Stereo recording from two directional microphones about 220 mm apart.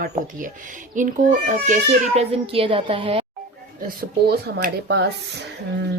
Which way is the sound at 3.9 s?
45° right (ahead or behind).